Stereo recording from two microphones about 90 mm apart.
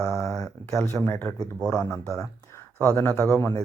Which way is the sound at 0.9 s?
35° left (ahead or behind).